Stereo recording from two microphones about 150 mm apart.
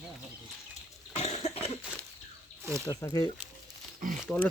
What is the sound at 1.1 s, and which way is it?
Cough, 45° left (ahead or behind).